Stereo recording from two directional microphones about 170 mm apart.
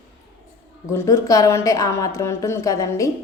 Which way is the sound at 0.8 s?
15° left (ahead or behind).